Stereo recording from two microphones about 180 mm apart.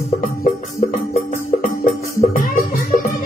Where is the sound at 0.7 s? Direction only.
50° left (ahead or behind).